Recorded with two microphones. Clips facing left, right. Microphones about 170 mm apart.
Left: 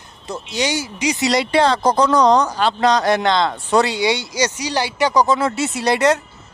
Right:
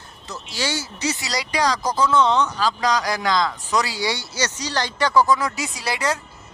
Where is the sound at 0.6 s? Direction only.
15° left (ahead or behind).